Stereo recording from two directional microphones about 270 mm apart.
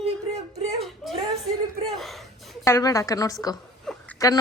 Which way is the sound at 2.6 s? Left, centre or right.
Centre.